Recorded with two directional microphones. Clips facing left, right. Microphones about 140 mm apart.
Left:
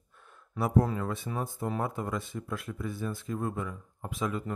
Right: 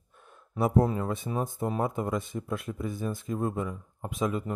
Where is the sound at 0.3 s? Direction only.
25° right (ahead or behind).